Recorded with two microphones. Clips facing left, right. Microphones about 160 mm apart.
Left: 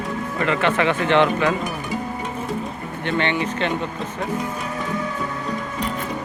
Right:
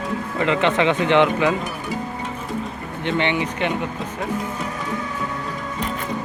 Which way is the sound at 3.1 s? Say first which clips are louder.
Right 1 dB; 15° right (ahead or behind).